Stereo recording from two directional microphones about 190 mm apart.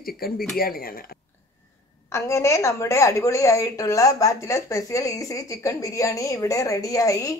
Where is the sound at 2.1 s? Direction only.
15° left (ahead or behind).